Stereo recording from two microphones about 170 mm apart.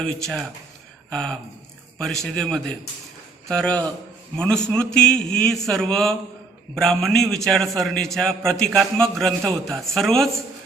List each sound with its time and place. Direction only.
0.0 s a man's voice: centre (ahead or behind)